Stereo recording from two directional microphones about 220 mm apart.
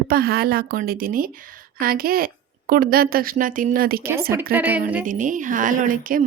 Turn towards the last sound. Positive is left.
turn(degrees=-40)  # may be behind; listen again after turning